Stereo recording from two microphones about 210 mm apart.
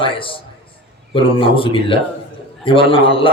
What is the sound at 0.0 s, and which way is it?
Speech, 25° left (ahead or behind).